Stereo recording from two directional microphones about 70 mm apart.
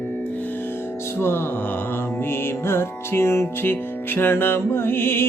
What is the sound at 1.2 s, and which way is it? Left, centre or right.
Music, left.